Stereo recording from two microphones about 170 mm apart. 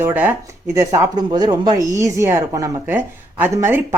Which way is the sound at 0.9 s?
25° right (ahead or behind).